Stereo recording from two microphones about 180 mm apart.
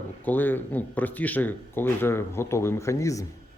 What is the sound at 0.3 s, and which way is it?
Speech, 10° left (ahead or behind).